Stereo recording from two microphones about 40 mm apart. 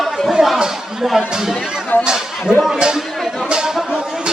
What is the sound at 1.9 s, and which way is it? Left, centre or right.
Speech, left.